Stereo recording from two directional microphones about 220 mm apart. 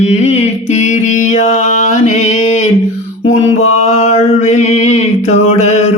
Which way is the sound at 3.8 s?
30° left (ahead or behind).